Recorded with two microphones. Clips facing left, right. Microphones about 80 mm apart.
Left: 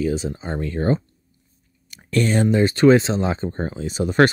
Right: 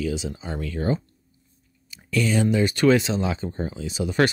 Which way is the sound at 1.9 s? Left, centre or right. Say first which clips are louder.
Left 3 dB; left.